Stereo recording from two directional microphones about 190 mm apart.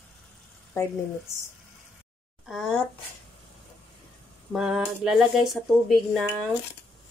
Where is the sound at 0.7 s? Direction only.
15° left (ahead or behind).